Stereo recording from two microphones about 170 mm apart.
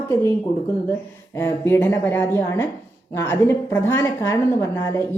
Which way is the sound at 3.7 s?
15° left (ahead or behind).